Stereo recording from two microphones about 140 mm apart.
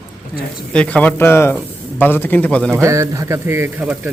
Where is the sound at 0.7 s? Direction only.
10° left (ahead or behind).